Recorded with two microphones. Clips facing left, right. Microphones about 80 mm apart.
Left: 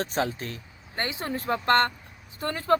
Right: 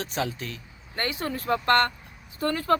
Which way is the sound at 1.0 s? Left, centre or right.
Left.